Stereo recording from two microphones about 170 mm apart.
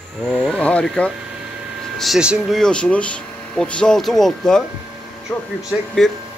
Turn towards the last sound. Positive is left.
turn(degrees=0)  # may be behind; listen again after turning